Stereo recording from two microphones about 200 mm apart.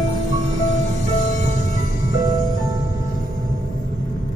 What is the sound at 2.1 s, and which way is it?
Music, 20° right (ahead or behind).